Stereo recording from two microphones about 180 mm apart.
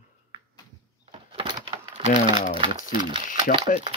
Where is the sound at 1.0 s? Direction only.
30° right (ahead or behind).